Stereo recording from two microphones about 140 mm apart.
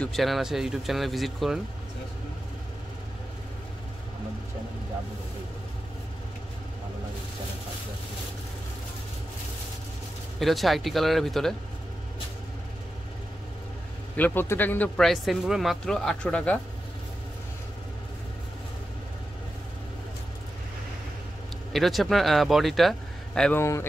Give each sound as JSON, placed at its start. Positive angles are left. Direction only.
{"t": 0.0, "sound": "speech", "side_deg": 0}
{"t": 10.4, "sound": "speech", "side_deg": 0}
{"t": 14.1, "sound": "a man's voice", "side_deg": 15}
{"t": 15.0, "sound": "speech", "side_deg": 0}
{"t": 21.7, "sound": "speech", "side_deg": 0}
{"t": 23.5, "sound": "speech", "side_deg": 20}